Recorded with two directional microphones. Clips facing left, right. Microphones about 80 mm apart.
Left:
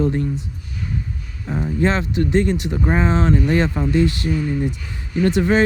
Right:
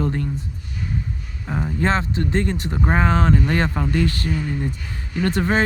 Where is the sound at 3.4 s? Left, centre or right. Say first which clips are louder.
Left 3 dB; right.